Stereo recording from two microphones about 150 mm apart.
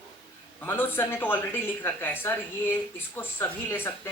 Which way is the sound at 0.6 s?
15° left (ahead or behind).